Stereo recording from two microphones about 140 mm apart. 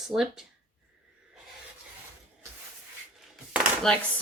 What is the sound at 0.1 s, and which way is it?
Speech, centre (ahead or behind).